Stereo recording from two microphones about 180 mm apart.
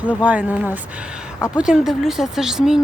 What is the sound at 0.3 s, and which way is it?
Speech, 10° right (ahead or behind).